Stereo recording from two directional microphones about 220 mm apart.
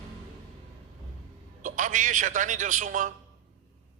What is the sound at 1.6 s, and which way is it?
A man's voice, 35° right (ahead or behind).